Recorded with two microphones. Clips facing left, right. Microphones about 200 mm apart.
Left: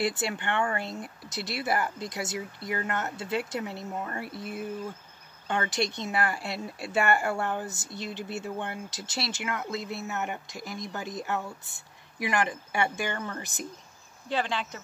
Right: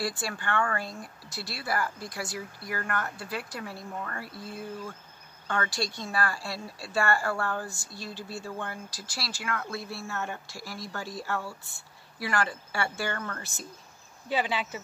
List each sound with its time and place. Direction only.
0.0 s speech: 20° left (ahead or behind)
14.3 s speech: 5° right (ahead or behind)